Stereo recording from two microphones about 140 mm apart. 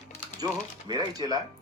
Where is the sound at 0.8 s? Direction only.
30° right (ahead or behind).